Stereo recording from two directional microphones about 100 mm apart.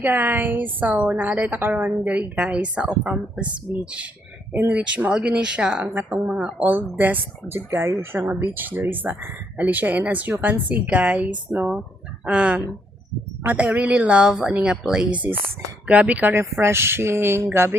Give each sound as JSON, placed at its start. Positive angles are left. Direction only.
{"t": 0.0, "sound": "a woman's voice", "side_deg": -15}
{"t": 4.8, "sound": "a woman's voice", "side_deg": -10}
{"t": 16.3, "sound": "speech", "side_deg": -25}